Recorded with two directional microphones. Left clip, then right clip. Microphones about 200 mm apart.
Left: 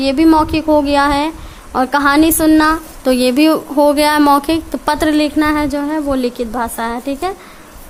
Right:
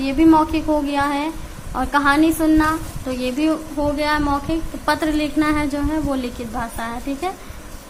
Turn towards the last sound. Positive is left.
turn(degrees=45)  # may be behind; listen again after turning